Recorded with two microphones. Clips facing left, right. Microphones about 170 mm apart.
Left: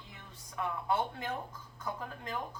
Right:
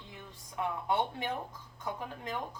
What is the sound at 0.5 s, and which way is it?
A woman's voice, 25° right (ahead or behind).